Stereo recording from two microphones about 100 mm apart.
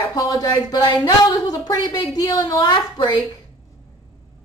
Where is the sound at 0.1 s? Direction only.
35° left (ahead or behind).